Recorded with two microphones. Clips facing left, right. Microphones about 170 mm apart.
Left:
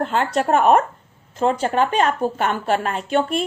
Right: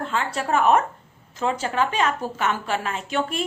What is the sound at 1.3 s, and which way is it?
Speech, 40° left (ahead or behind).